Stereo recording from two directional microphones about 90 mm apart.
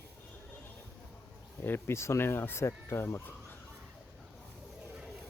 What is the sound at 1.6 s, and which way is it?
Speech, 25° left (ahead or behind).